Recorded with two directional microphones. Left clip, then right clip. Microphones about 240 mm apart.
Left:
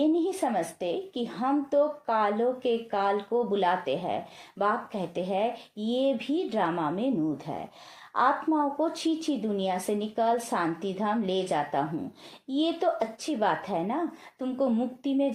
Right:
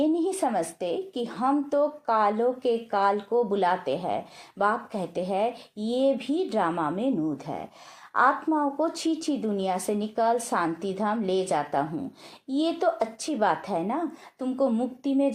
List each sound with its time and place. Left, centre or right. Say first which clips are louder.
0.0 s a woman's voice: right 1 dB; right